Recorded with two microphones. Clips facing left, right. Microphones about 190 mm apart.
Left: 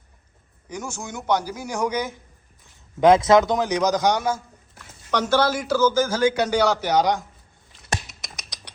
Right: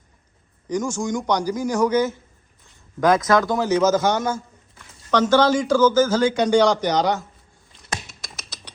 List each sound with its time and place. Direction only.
0.7 s speech: 10° left (ahead or behind)
3.0 s speech: 25° left (ahead or behind)
8.1 s typing: centre (ahead or behind)